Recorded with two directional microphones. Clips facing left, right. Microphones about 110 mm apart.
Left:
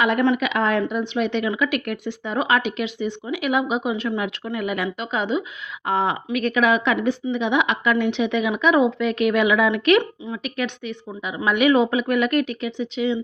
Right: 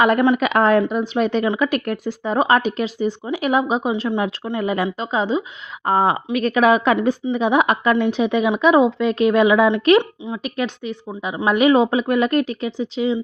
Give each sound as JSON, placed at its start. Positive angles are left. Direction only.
{"t": 0.0, "sound": "speech", "side_deg": -50}
{"t": 10.4, "sound": "speech", "side_deg": -35}